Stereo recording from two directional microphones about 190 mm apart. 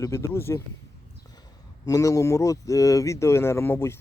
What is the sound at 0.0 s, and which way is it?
Speech, 15° left (ahead or behind).